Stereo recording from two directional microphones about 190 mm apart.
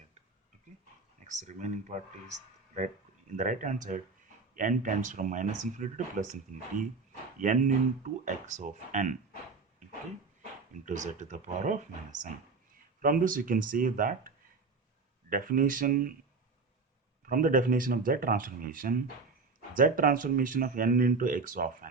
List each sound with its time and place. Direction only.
1.2 s speech: 40° right (ahead or behind)
3.3 s speech: 40° right (ahead or behind)
10.8 s speech: 40° right (ahead or behind)
17.2 s speech: 45° right (ahead or behind)